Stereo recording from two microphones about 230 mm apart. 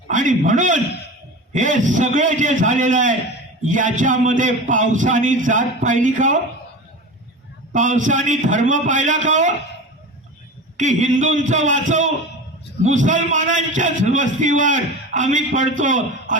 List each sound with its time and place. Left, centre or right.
0.1 s a man's voice: right
7.7 s a man's voice: right
10.8 s a man's voice: right